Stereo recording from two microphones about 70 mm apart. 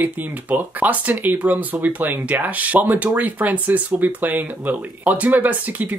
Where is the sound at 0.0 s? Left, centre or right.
Right.